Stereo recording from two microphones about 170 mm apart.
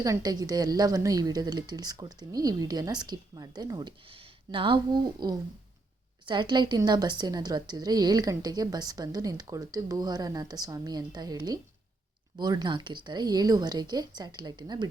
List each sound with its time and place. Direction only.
0.0 s a woman's voice: 20° right (ahead or behind)